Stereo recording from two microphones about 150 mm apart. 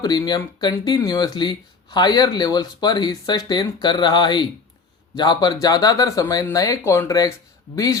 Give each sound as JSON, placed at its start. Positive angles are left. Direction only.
{"t": 0.0, "sound": "speech", "side_deg": 25}